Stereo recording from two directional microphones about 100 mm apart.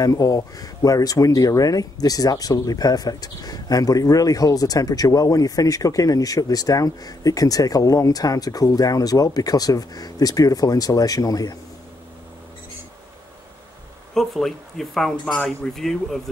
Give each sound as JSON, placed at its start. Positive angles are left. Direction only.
{"t": 0.0, "sound": "speech", "side_deg": 40}
{"t": 14.1, "sound": "speech", "side_deg": 5}